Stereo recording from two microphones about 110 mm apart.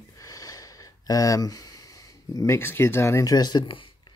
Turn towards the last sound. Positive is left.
turn(degrees=45)  # may be behind; listen again after turning